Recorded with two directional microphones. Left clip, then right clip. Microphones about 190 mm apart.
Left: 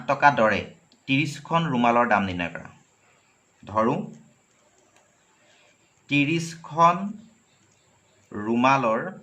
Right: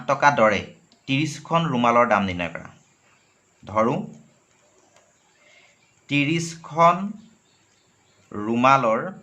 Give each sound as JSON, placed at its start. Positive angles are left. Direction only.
{"t": 0.0, "sound": "speech", "side_deg": -25}
{"t": 6.1, "sound": "speech", "side_deg": -25}
{"t": 8.3, "sound": "speech", "side_deg": -25}